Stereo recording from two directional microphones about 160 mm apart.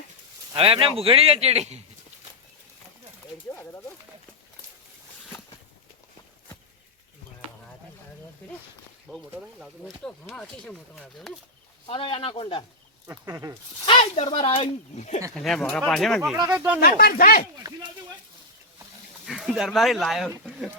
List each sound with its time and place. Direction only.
0.5 s speech: 35° right (ahead or behind)
3.5 s a sound: 15° left (ahead or behind)
9.0 s speech: centre (ahead or behind)
11.9 s speech: 35° left (ahead or behind)
13.1 s speech: 20° right (ahead or behind)
13.8 s speech: 35° left (ahead or behind)
15.4 s speech: centre (ahead or behind)
16.4 s speech: 20° right (ahead or behind)
17.0 s speech: 65° left (ahead or behind)
19.2 s speech: centre (ahead or behind)